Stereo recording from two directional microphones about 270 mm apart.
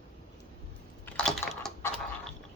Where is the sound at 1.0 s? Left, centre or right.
Centre.